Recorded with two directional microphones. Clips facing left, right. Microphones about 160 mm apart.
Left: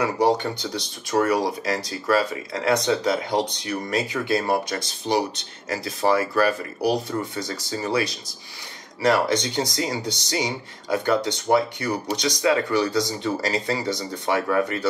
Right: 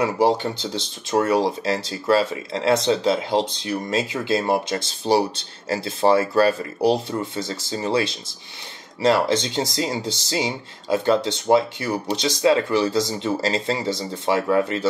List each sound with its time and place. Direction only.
0.0 s speech: 25° right (ahead or behind)